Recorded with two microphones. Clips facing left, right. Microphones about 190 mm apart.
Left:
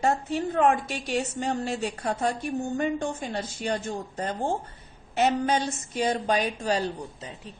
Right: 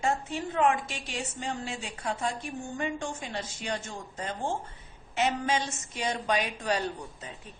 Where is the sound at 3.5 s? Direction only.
35° left (ahead or behind).